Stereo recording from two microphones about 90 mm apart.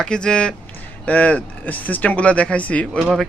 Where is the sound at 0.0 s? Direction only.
10° left (ahead or behind).